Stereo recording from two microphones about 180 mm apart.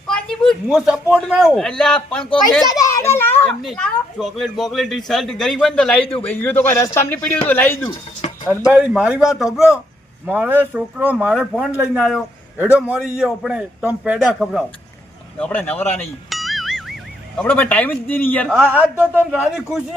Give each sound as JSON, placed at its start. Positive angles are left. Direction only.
{"t": 0.1, "sound": "a man's voice", "side_deg": 0}
{"t": 2.6, "sound": "children playing", "side_deg": 20}
{"t": 3.6, "sound": "a man's voice", "side_deg": 0}
{"t": 8.2, "sound": "music", "side_deg": 35}
{"t": 8.7, "sound": "a man's voice", "side_deg": -5}
{"t": 15.4, "sound": "a man's voice", "side_deg": 10}
{"t": 16.3, "sound": "music", "side_deg": 0}
{"t": 17.3, "sound": "a man's voice", "side_deg": 10}
{"t": 18.5, "sound": "speech", "side_deg": -10}